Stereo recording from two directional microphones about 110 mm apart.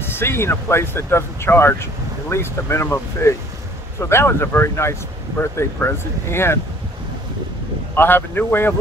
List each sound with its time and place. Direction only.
0.1 s speech: 20° left (ahead or behind)
7.9 s speech: 20° left (ahead or behind)